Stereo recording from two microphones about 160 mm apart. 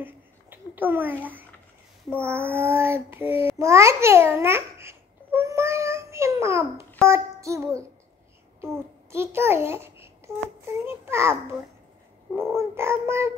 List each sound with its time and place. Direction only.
0.0 s babbling: 10° right (ahead or behind)
2.0 s child singing: 15° right (ahead or behind)
7.0 s a child's voice: 20° right (ahead or behind)
12.4 s a sound: 15° right (ahead or behind)